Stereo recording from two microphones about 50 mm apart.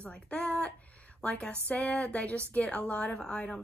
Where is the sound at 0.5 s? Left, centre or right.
Left.